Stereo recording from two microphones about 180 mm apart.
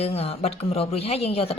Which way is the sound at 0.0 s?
35° left (ahead or behind).